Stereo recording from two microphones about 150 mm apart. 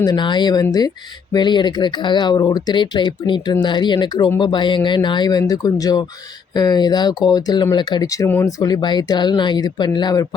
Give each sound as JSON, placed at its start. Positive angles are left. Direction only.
{"t": 0.0, "sound": "speech", "side_deg": 30}
{"t": 8.3, "sound": "speech", "side_deg": 15}
{"t": 8.6, "sound": "speech", "side_deg": 30}